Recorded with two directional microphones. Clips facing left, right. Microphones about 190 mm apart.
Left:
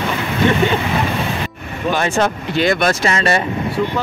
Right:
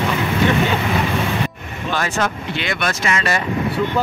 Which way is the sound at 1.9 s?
25° left (ahead or behind).